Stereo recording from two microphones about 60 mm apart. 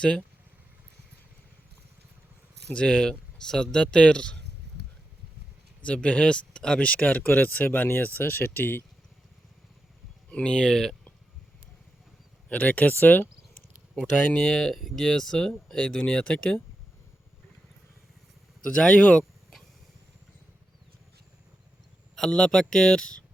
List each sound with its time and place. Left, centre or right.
0.0 s speech: centre
2.7 s speech: centre
5.8 s speech: centre; by 8.8 s left
10.3 s speech: centre
12.5 s speech: left
14.3 s speech: centre
18.6 s speech: centre
22.1 s speech: centre